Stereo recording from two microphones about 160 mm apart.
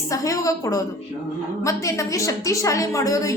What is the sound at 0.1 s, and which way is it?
A woman's voice, 20° left (ahead or behind).